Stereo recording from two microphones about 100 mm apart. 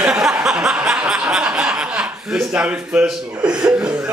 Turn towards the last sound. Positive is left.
turn(degrees=-10)  # may be behind; listen again after turning